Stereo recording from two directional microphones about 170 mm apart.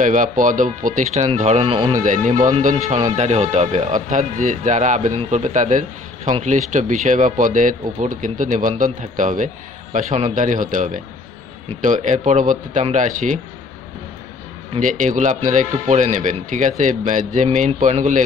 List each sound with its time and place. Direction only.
0.0 s speech: 50° right (ahead or behind); by 2.0 s 30° right (ahead or behind)
2.0 s speech: 50° right (ahead or behind)
14.8 s speech: 50° right (ahead or behind)